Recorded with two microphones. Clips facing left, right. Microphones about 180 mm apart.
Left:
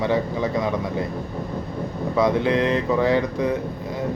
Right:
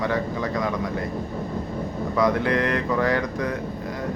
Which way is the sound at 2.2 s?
25° left (ahead or behind).